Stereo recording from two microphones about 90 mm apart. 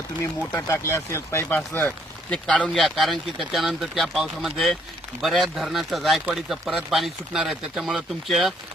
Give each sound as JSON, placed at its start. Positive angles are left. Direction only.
{"t": 0.7, "sound": "speech", "side_deg": 35}
{"t": 1.5, "sound": "speech", "side_deg": 20}
{"t": 2.6, "sound": "speech", "side_deg": 0}